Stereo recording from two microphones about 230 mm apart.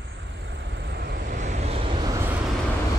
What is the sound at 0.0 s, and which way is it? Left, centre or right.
Vehicle, right.